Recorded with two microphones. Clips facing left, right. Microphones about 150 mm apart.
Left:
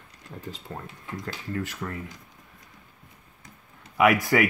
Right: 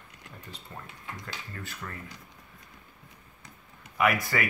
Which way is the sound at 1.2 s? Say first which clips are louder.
Left 10 dB; 90° left.